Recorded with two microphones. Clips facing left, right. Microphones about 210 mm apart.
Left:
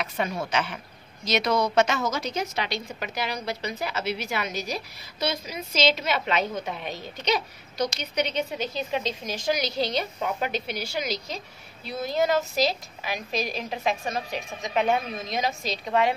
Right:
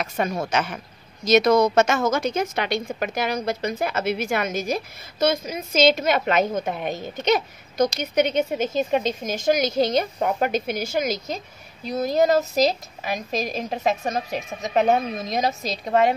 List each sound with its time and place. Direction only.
0.0 s a woman's voice: 45° right (ahead or behind)